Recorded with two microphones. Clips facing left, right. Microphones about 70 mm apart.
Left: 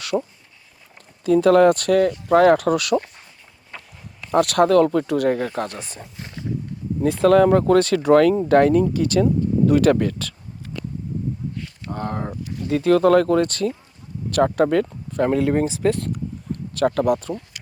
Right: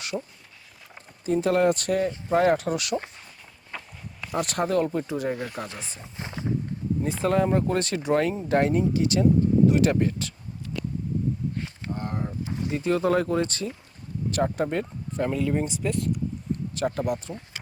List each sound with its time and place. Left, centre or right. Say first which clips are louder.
0.1 s speech: left 10 dB; left
1.2 s speech: left 8 dB; left
3.7 s walk: right 1 dB; centre
4.4 s speech: left 9 dB; left
6.1 s speech: right 1 dB; right
7.0 s speech: left 10 dB; left
7.7 s speech: left 10 dB; left
9.9 s speech: left 5 dB; left
11.9 s speech: left 5 dB; left
12.4 s a sound: left 1 dB; right
12.7 s speech: left 8 dB; left
15.2 s speech: left 7 dB; left
16.0 s speech: even; left